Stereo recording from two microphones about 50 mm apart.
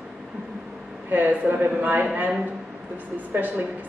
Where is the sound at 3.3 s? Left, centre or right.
Right.